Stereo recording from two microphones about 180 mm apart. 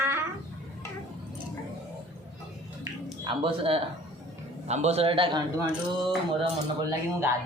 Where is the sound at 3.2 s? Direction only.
25° right (ahead or behind).